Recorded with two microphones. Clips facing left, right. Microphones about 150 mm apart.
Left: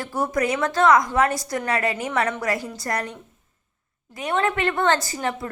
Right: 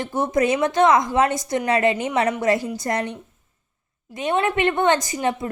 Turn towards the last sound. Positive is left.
turn(degrees=-20)  # may be behind; listen again after turning